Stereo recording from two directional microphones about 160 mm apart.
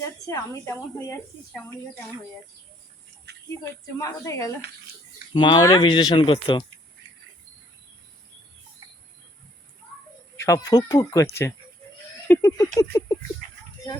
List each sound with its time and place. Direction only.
0.0 s a woman's voice: 20° left (ahead or behind)
3.3 s a sound: 90° right
3.9 s a woman's voice: 20° left (ahead or behind)
10.3 s a woman's voice: 20° left (ahead or behind)